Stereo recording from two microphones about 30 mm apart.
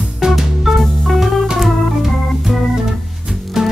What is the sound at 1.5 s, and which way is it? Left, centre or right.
Organ, centre.